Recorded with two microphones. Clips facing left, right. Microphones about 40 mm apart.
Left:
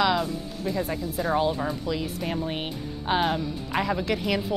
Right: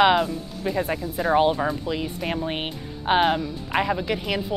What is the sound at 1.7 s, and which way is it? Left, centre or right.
Speech, right.